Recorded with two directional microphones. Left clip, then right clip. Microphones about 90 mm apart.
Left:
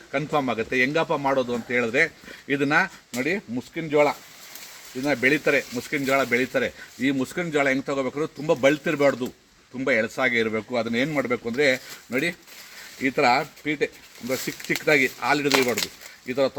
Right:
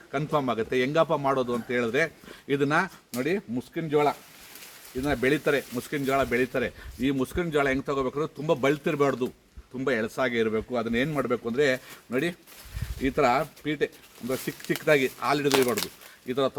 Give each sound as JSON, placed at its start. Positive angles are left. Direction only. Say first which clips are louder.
{"t": 0.1, "sound": "a man's voice", "louder": "left 2 dB", "side_deg": -25}
{"t": 3.2, "sound": "speech", "louder": "left 2 dB", "side_deg": -10}
{"t": 3.8, "sound": "a man's voice", "louder": "left 4 dB", "side_deg": -25}
{"t": 5.0, "sound": "a man's voice", "louder": "left 4 dB", "side_deg": -20}
{"t": 6.1, "sound": "speech", "louder": "left 3 dB", "side_deg": 0}
{"t": 9.7, "sound": "speech", "louder": "left 4 dB", "side_deg": -15}
{"t": 15.3, "sound": "a man's voice", "louder": "left 1 dB", "side_deg": -25}